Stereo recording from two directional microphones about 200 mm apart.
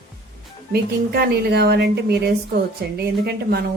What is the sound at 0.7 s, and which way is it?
A woman's voice, 50° right (ahead or behind).